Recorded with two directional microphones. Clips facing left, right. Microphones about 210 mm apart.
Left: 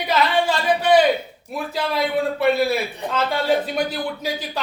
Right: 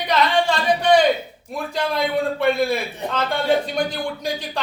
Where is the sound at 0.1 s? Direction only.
5° left (ahead or behind).